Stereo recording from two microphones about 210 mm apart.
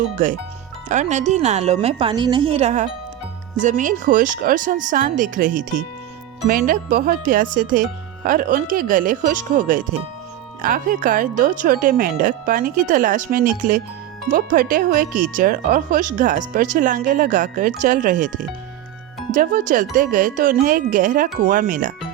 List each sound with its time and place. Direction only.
0.9 s a woman's voice: 35° right (ahead or behind)